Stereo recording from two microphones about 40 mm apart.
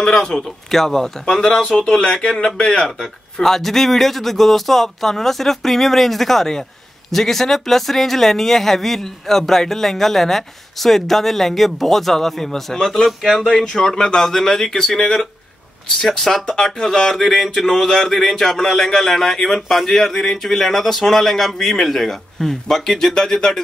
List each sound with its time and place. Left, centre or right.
0.0 s speech: centre